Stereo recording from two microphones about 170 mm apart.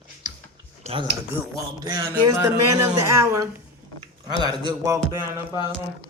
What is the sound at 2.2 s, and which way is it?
A man's voice, 15° right (ahead or behind).